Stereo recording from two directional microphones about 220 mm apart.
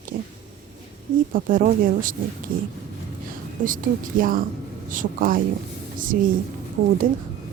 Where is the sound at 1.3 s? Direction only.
40° right (ahead or behind).